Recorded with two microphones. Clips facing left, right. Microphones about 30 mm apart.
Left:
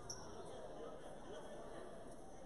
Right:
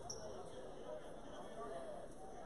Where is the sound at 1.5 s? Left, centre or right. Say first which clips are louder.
Right 4 dB; centre.